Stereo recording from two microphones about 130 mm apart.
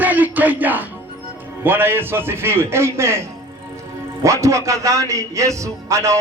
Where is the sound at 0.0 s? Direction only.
15° right (ahead or behind).